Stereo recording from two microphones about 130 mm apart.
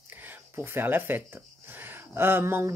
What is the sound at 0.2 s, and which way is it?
Speech, 15° right (ahead or behind).